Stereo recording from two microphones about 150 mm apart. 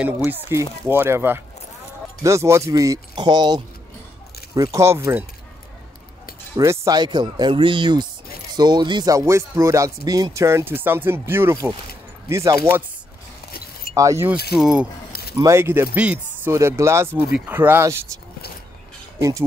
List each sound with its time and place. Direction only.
0.2 s speech: 20° right (ahead or behind)
4.7 s speech: 20° right (ahead or behind)
6.5 s speech: 20° right (ahead or behind)
13.9 s speech: 20° right (ahead or behind)
14.5 s speech: 5° right (ahead or behind)
15.3 s speech: 20° right (ahead or behind)
19.1 s speech: 20° right (ahead or behind)